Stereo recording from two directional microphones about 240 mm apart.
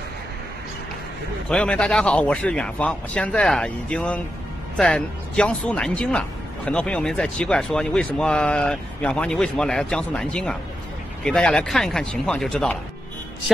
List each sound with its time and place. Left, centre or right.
1.5 s speech: centre